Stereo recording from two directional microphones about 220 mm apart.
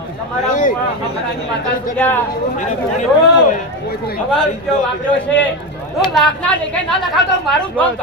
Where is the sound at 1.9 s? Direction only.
10° left (ahead or behind).